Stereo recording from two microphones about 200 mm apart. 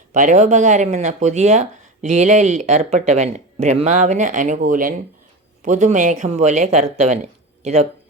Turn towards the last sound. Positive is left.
turn(degrees=-30)  # may be behind; listen again after turning